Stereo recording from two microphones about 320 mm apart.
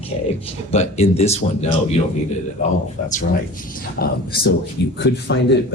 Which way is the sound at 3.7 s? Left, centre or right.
Left.